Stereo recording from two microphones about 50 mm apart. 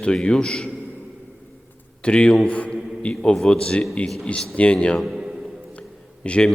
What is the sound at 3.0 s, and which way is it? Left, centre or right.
A man's voice, centre.